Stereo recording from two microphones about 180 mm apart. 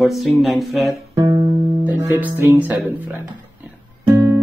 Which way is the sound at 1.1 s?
20° right (ahead or behind).